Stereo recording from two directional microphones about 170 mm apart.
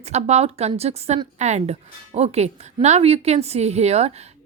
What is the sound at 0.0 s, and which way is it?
A woman's voice, 40° right (ahead or behind).